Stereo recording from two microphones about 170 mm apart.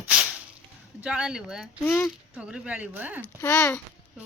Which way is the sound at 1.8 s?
10° left (ahead or behind).